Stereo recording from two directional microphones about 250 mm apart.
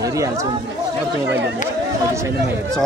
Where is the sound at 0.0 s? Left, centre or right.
Centre.